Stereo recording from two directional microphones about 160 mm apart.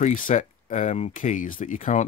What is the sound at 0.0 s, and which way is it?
Speech, 50° left (ahead or behind).